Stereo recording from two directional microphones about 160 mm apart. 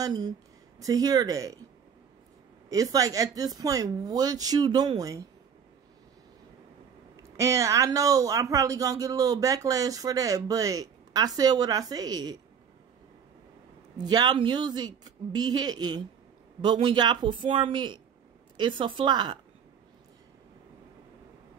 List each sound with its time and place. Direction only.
0.0 s speech: 25° right (ahead or behind)
2.7 s speech: 20° right (ahead or behind)
7.3 s speech: 20° right (ahead or behind)
14.0 s speech: 25° right (ahead or behind)